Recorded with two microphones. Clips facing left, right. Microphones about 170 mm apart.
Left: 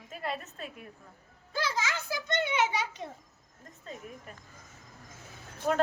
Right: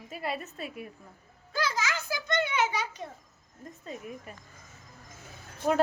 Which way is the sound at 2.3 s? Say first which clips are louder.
Right 1 dB; 25° left (ahead or behind).